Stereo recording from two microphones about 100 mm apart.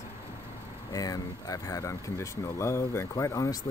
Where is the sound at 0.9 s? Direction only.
40° left (ahead or behind).